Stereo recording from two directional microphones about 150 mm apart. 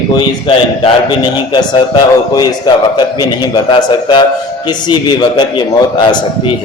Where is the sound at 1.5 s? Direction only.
30° left (ahead or behind).